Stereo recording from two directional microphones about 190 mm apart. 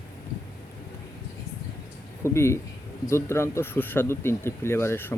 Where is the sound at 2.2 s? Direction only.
15° left (ahead or behind).